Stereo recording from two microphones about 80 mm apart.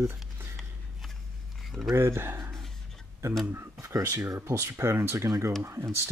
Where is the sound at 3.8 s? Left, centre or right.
Right.